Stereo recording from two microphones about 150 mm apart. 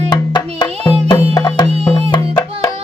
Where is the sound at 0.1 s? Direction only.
30° left (ahead or behind).